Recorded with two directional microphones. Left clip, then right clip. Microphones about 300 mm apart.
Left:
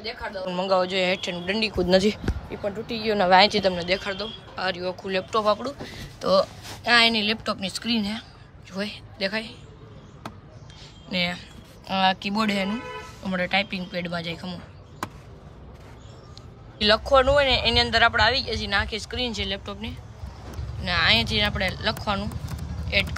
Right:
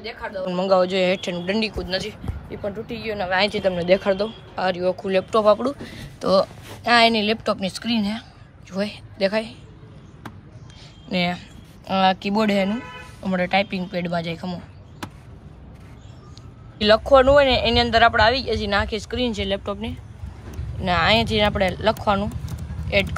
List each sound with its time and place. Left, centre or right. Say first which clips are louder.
0.0 s speech: right 2 dB; centre
1.8 s speech: left 6 dB; left
3.3 s speech: left 1 dB; centre
11.1 s speech: right 3 dB; centre
16.7 s speech: right 4 dB; centre